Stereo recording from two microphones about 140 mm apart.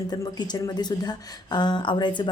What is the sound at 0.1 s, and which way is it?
A woman's voice, 30° left (ahead or behind).